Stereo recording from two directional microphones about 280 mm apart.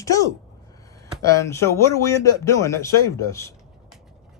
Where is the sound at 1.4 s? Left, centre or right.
Centre.